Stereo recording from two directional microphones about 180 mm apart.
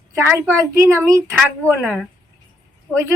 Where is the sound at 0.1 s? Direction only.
15° right (ahead or behind).